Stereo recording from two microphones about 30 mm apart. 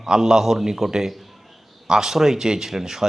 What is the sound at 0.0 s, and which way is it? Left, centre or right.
Speech, centre.